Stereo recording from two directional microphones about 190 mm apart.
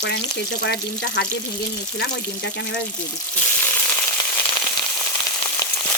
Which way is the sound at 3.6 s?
10° left (ahead or behind).